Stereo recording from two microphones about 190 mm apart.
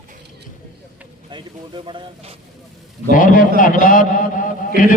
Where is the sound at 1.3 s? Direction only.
25° right (ahead or behind).